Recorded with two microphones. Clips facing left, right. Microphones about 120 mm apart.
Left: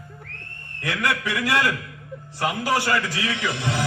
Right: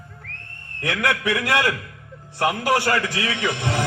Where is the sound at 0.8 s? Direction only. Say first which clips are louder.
Right 2 dB; 60° right (ahead or behind).